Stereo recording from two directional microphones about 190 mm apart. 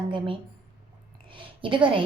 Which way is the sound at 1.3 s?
25° right (ahead or behind).